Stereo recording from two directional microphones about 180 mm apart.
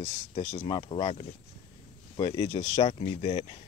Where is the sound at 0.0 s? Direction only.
30° left (ahead or behind).